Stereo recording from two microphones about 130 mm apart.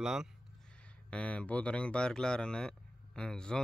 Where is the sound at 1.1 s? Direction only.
10° left (ahead or behind).